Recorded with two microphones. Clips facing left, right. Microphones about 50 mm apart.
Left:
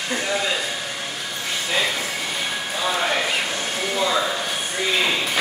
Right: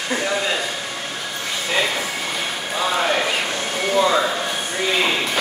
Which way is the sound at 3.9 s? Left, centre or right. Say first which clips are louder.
Right 5 dB; centre.